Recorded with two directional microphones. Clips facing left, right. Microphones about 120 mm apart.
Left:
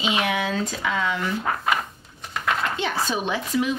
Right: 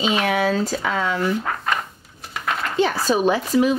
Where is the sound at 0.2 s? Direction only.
35° right (ahead or behind).